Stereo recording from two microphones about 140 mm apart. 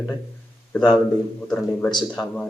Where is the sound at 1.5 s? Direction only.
5° left (ahead or behind).